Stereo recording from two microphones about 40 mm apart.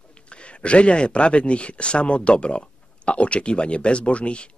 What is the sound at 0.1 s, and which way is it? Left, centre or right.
Speech, left.